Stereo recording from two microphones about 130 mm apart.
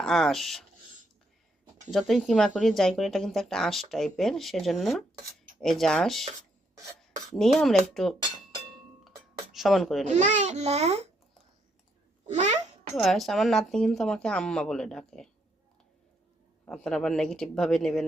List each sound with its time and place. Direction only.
0.0 s speech: 5° left (ahead or behind)
1.9 s speech: centre (ahead or behind)
7.3 s speech: 5° left (ahead or behind)
8.4 s dishes: centre (ahead or behind)
10.2 s a child's voice: 65° right (ahead or behind)
12.2 s babbling: 65° right (ahead or behind)
13.0 s speech: centre (ahead or behind)
16.6 s speech: 5° left (ahead or behind)